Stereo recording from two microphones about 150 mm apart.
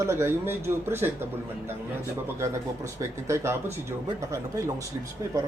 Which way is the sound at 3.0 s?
20° right (ahead or behind).